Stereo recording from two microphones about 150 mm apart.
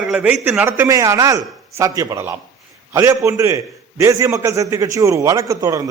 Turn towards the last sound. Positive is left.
turn(degrees=-25)  # may be behind; listen again after turning